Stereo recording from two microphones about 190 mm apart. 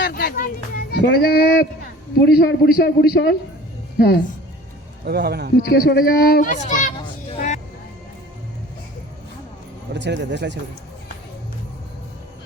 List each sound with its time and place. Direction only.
0.0 s a sound: 55° left (ahead or behind)
2.2 s a man's voice: 60° left (ahead or behind)
5.0 s speech: 60° right (ahead or behind)
5.5 s a man's voice: 55° left (ahead or behind)
6.7 s children playing: 40° left (ahead or behind)
7.0 s vehicle: 35° left (ahead or behind)
9.9 s speech: 65° right (ahead or behind)